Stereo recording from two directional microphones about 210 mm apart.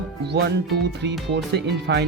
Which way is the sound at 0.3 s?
50° right (ahead or behind).